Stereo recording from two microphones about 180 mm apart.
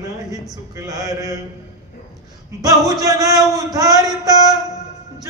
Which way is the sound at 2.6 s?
20° right (ahead or behind).